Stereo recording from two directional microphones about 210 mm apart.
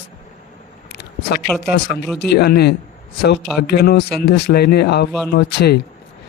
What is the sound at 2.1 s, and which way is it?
Speech, 50° left (ahead or behind).